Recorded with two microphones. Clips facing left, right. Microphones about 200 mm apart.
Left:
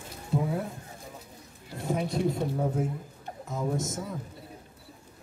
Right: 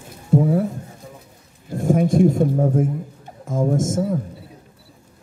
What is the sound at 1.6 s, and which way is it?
Speech, 50° right (ahead or behind).